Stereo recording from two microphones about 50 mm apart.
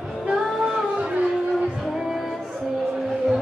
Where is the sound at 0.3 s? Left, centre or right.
Centre.